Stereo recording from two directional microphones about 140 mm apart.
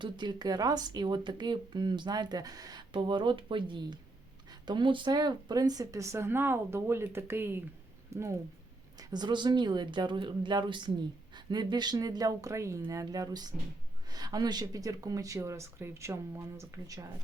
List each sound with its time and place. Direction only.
0.0 s speech: 30° right (ahead or behind)